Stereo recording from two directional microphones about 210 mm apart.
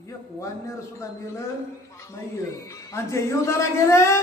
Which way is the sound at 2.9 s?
15° left (ahead or behind).